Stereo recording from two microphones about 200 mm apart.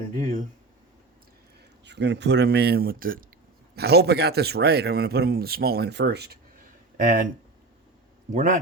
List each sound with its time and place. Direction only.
1.8 s a man's voice: 60° right (ahead or behind)
6.9 s speech: 45° right (ahead or behind)
8.3 s a man's voice: 40° right (ahead or behind)